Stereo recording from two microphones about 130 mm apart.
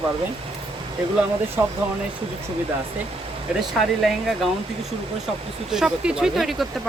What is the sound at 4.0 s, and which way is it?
Speech, centre (ahead or behind).